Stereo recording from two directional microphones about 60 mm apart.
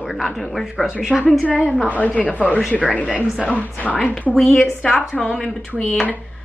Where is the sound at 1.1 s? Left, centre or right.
Centre.